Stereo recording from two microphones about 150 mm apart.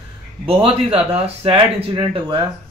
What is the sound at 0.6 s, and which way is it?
Speech, 40° right (ahead or behind).